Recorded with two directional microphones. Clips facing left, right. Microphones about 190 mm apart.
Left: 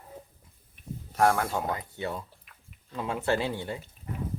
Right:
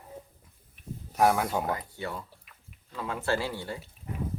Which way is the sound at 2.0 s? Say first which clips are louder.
Left 2 dB; 20° left (ahead or behind).